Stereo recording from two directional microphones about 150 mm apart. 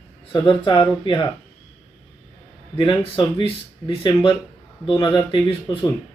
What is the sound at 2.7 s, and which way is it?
Speech, 35° left (ahead or behind).